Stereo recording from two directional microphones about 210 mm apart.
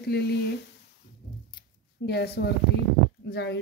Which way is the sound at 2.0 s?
50° left (ahead or behind).